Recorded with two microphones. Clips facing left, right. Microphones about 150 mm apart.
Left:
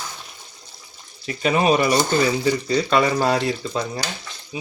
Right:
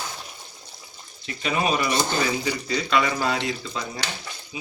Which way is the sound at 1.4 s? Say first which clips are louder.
Left 6 dB; 40° left (ahead or behind).